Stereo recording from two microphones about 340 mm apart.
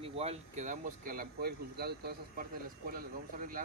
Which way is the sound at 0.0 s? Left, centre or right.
Centre.